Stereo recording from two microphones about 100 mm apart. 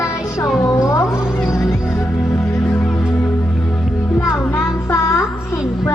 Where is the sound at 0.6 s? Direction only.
30° left (ahead or behind).